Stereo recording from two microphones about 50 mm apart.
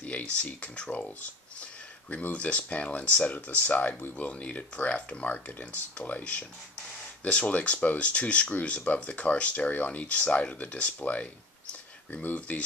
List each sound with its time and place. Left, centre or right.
0.0 s speech: left
1.6 s a sound: left
2.3 s speech: left
12.4 s speech: left